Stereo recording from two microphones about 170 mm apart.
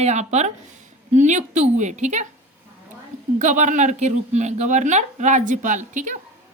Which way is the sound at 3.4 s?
45° right (ahead or behind).